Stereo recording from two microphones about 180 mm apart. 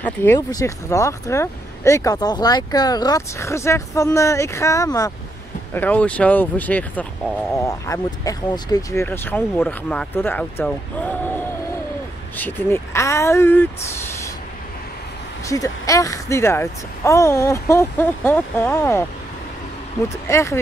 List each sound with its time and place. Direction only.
0.0 s speech: 10° left (ahead or behind)
15.4 s speech: 20° left (ahead or behind)
20.2 s speech: 15° left (ahead or behind)